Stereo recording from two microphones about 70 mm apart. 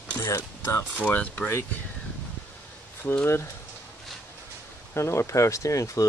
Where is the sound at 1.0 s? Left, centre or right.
Left.